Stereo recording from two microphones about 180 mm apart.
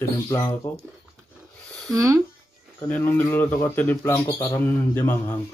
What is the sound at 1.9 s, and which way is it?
Speech, 20° right (ahead or behind).